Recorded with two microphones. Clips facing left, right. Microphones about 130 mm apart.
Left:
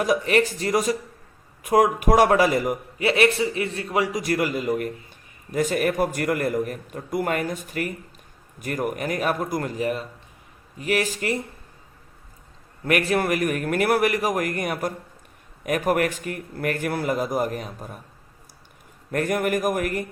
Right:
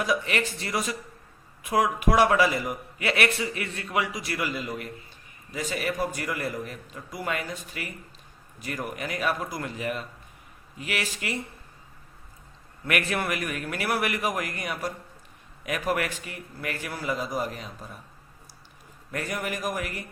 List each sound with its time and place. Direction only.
0.0 s a man's voice: 40° left (ahead or behind)
3.0 s a man's voice: 30° left (ahead or behind)
12.8 s a man's voice: 35° left (ahead or behind)
19.1 s a man's voice: 50° left (ahead or behind)